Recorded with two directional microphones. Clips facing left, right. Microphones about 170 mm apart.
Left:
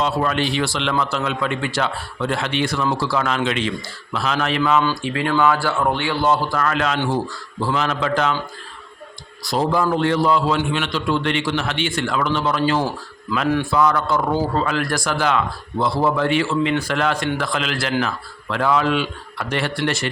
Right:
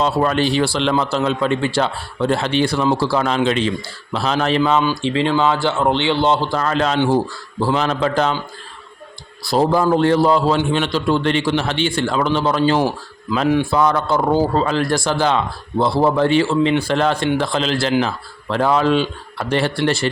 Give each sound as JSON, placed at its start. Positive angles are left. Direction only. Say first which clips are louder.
{"t": 0.0, "sound": "a man's voice", "louder": "right 3 dB", "side_deg": -35}
{"t": 4.8, "sound": "a man's voice", "louder": "right 3 dB", "side_deg": -20}
{"t": 9.5, "sound": "a man's voice", "louder": "right 4 dB", "side_deg": -35}